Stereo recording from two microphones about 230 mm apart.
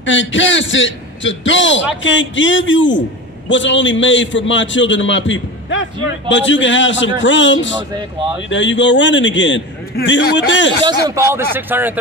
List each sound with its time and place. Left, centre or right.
0.0 s a man's voice: left
10.9 s speech: centre